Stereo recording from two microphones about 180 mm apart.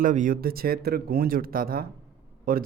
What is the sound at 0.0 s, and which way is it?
A man's voice, 45° right (ahead or behind).